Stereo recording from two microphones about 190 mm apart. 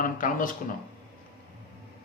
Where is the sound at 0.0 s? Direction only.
45° left (ahead or behind).